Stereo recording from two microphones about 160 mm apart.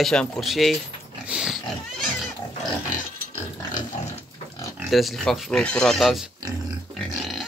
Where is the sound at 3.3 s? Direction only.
45° left (ahead or behind).